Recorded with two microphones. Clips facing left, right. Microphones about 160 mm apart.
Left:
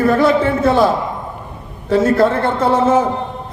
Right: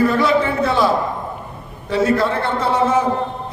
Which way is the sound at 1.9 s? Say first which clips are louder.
Left 4 dB; 50° left (ahead or behind).